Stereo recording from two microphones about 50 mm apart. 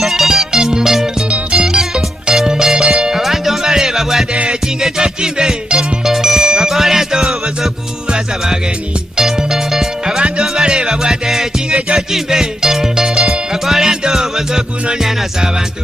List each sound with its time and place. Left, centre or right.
0.0 s music: centre
4.3 s music: right